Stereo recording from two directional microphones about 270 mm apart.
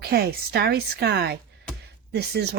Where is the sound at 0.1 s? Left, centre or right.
Right.